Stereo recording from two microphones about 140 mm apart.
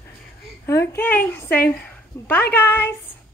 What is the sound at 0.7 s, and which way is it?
A woman's voice, 20° left (ahead or behind).